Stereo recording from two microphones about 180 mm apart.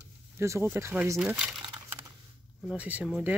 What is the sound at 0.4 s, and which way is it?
Speech, 15° right (ahead or behind).